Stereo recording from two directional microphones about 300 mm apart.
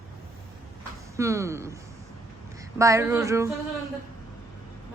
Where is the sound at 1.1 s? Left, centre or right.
Centre.